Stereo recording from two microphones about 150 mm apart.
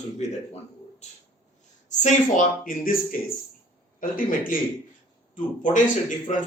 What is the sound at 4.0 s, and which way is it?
Speech, 65° left (ahead or behind).